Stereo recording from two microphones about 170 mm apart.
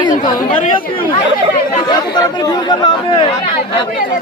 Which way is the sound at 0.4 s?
50° left (ahead or behind).